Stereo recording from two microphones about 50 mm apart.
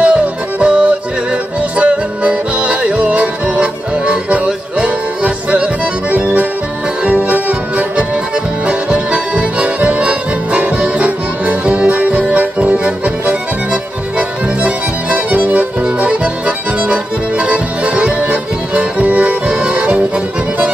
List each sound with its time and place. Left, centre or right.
0.0 s music: right